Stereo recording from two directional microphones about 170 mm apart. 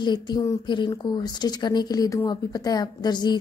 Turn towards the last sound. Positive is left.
turn(degrees=25)  # may be behind; listen again after turning